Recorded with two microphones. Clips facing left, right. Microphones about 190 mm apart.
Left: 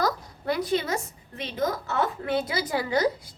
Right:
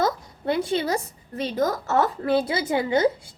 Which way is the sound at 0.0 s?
25° right (ahead or behind).